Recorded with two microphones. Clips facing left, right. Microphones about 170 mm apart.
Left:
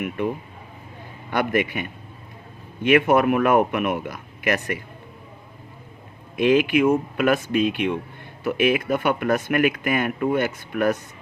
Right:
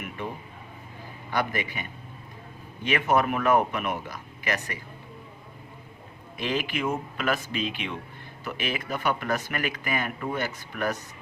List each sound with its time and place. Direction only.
1.3 s speech: 55° left (ahead or behind)
6.3 s speech: 55° left (ahead or behind)